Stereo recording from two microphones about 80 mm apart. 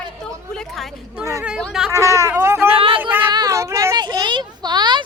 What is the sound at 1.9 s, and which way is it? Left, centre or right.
Speech, right.